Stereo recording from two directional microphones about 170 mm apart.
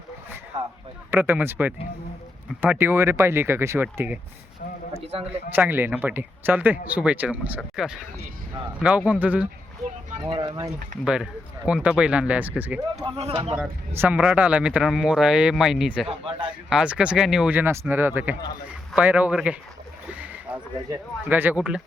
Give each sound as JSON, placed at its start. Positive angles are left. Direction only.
{"t": 1.1, "sound": "speech", "side_deg": -10}
{"t": 5.3, "sound": "speech", "side_deg": -10}
{"t": 10.2, "sound": "speech", "side_deg": -30}
{"t": 11.0, "sound": "speech", "side_deg": -5}
{"t": 13.1, "sound": "a man's voice", "side_deg": -35}
{"t": 13.6, "sound": "speech", "side_deg": -10}
{"t": 16.0, "sound": "a man's voice", "side_deg": -30}
{"t": 16.6, "sound": "speech", "side_deg": -5}
{"t": 20.1, "sound": "a sound", "side_deg": -10}
{"t": 21.2, "sound": "speech", "side_deg": -10}